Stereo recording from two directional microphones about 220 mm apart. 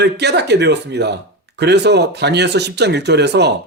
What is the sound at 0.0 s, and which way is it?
A man's voice, 50° right (ahead or behind).